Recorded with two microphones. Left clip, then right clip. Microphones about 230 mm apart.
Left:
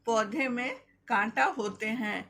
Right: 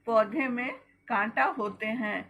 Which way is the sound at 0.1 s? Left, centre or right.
Left.